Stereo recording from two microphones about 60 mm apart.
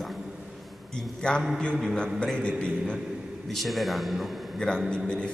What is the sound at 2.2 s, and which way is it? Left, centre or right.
Speech, centre.